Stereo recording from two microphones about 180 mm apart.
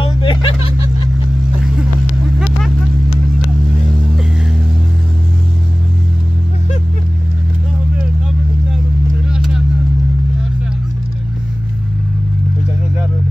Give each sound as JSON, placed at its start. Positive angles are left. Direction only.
{"t": 0.0, "sound": "vehicle", "side_deg": 25}
{"t": 9.3, "sound": "vehicle", "side_deg": -5}